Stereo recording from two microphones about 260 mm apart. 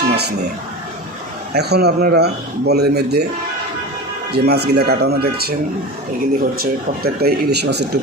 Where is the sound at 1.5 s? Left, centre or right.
Right.